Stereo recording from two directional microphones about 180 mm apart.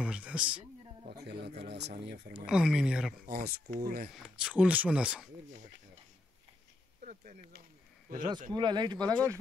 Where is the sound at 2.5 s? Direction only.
5° right (ahead or behind).